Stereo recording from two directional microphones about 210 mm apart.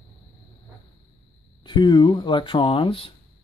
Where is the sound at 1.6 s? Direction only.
20° left (ahead or behind).